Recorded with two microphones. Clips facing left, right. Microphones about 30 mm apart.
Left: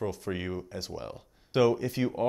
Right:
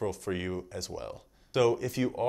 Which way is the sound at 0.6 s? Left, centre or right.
Left.